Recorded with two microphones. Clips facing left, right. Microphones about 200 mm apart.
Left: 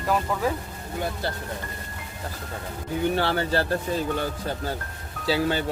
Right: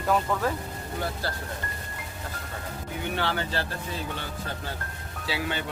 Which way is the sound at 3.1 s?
40° left (ahead or behind).